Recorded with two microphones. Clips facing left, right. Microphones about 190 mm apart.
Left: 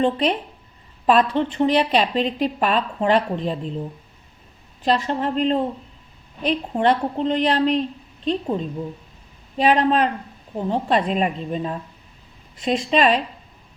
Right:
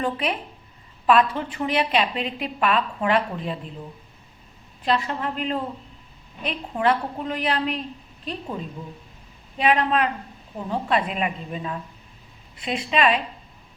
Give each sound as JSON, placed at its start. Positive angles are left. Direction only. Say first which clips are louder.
{"t": 0.0, "sound": "a woman's voice", "louder": "left 6 dB", "side_deg": 30}
{"t": 4.9, "sound": "a woman's voice", "louder": "left 4 dB", "side_deg": 35}
{"t": 9.6, "sound": "a woman's voice", "louder": "left 4 dB", "side_deg": 35}
{"t": 12.5, "sound": "a woman's voice", "louder": "left 6 dB", "side_deg": -5}
{"t": 12.9, "sound": "a woman's voice", "louder": "left 2 dB", "side_deg": 35}